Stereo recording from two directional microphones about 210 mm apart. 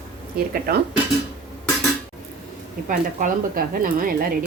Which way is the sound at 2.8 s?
40° right (ahead or behind).